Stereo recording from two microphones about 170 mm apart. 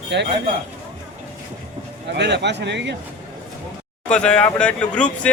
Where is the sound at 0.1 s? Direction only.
90° right.